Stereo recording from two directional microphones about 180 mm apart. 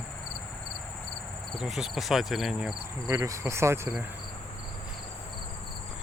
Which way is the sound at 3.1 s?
20° right (ahead or behind).